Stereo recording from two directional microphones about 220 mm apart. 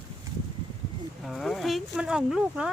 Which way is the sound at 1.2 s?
Centre (ahead or behind).